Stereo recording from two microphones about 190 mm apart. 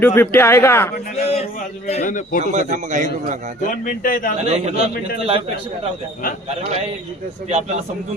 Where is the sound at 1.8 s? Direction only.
35° left (ahead or behind).